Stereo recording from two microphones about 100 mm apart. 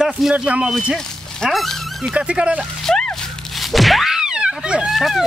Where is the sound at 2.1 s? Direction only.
10° right (ahead or behind).